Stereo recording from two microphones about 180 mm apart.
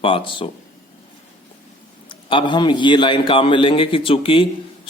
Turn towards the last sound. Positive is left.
turn(degrees=30)  # may be behind; listen again after turning